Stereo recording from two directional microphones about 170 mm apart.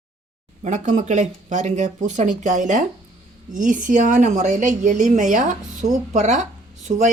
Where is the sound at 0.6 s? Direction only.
50° right (ahead or behind).